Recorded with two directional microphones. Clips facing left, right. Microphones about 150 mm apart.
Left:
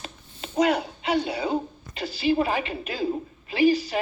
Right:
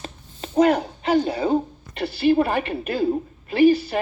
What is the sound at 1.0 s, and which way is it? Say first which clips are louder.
Speech: right 6 dB; 45° right (ahead or behind).